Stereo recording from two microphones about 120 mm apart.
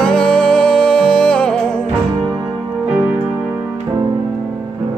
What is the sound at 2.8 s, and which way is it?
Music, 10° right (ahead or behind).